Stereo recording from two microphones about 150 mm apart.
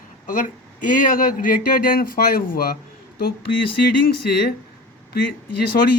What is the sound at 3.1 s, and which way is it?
Speech, 90° left.